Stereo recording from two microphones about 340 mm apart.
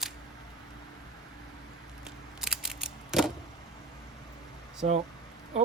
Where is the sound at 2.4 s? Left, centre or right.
Centre.